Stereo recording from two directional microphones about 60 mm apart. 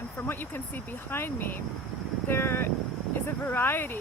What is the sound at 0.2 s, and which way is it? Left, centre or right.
Speech, left.